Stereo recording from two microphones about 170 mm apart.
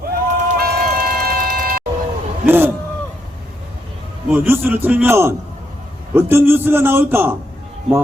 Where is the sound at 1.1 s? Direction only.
55° right (ahead or behind).